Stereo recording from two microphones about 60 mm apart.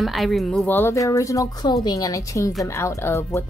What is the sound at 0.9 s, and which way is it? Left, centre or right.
A woman's voice, left.